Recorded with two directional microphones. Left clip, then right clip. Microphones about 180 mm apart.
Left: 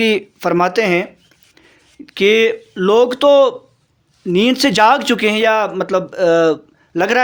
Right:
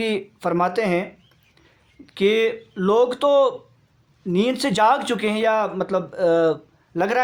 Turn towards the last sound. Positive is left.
turn(degrees=40)  # may be behind; listen again after turning